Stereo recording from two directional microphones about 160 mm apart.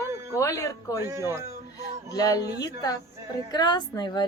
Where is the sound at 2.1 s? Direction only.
25° left (ahead or behind).